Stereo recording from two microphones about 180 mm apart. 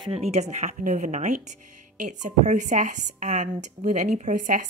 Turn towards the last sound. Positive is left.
turn(degrees=-45)  # may be behind; listen again after turning